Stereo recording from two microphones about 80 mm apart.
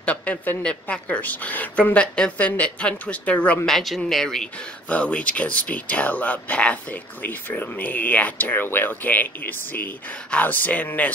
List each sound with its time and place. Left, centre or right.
0.0 s speech: centre
3.6 s speech: centre
4.8 s speech: centre